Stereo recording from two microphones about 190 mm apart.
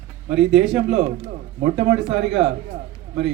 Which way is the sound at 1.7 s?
40° right (ahead or behind).